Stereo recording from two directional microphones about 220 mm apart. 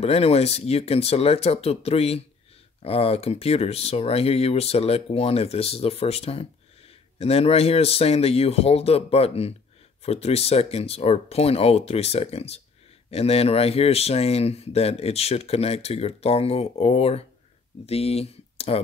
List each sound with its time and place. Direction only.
0.0 s speech: 25° left (ahead or behind)